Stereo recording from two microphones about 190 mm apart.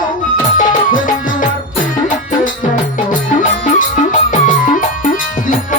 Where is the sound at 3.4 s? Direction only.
45° left (ahead or behind).